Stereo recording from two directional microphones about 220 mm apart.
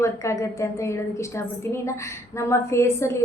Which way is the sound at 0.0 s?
15° left (ahead or behind).